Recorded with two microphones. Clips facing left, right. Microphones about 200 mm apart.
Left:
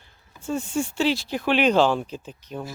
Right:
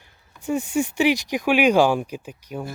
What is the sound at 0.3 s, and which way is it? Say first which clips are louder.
Speech: right 3 dB; 15° right (ahead or behind).